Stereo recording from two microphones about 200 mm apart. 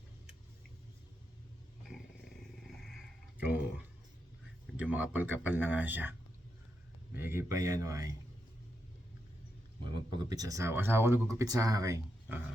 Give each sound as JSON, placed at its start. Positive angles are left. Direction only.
{"t": 2.6, "sound": "a sound", "side_deg": 0}
{"t": 4.6, "sound": "speech", "side_deg": -5}
{"t": 9.9, "sound": "speech", "side_deg": -20}